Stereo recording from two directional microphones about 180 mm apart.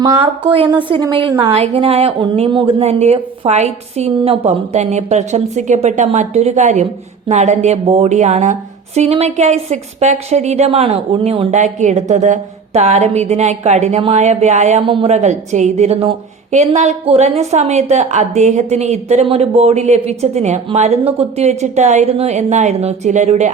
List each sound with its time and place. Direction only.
0.2 s a woman's voice: 30° right (ahead or behind)